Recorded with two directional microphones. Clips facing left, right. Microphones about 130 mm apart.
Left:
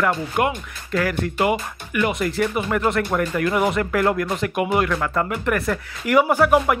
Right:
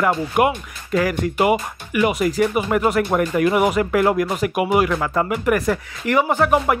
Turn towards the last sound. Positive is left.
turn(degrees=0)  # may be behind; listen again after turning